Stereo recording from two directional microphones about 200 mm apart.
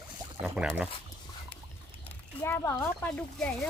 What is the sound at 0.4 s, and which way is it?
Speech, 5° right (ahead or behind).